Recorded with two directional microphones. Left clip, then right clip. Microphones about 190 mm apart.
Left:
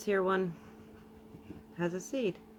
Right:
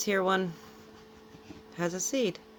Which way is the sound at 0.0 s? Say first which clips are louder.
Right 3 dB; 20° right (ahead or behind).